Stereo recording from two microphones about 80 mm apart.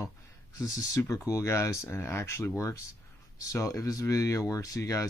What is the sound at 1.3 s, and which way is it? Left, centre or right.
Speech, left.